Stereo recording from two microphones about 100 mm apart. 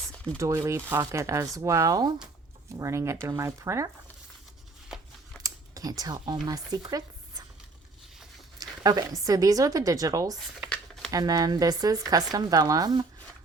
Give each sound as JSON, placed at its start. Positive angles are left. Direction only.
{"t": 0.3, "sound": "speech", "side_deg": -30}
{"t": 2.7, "sound": "speech", "side_deg": -30}
{"t": 5.4, "sound": "speech", "side_deg": -40}
{"t": 8.5, "sound": "speech", "side_deg": -40}